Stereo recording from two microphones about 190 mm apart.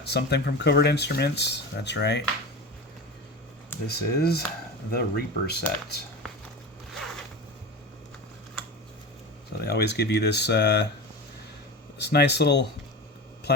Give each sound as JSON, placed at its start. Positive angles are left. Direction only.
{"t": 0.0, "sound": "speech", "side_deg": 60}
{"t": 3.8, "sound": "speech", "side_deg": 55}
{"t": 6.9, "sound": "zipper", "side_deg": 0}
{"t": 9.6, "sound": "speech", "side_deg": 60}
{"t": 11.9, "sound": "speech", "side_deg": 60}